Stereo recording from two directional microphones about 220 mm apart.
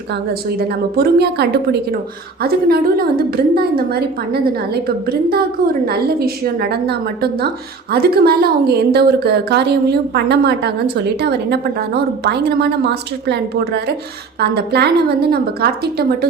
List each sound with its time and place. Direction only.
0.9 s a woman's voice: 45° right (ahead or behind)